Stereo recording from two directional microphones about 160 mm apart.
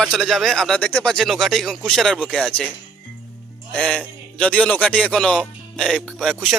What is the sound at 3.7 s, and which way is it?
Speech, 5° left (ahead or behind).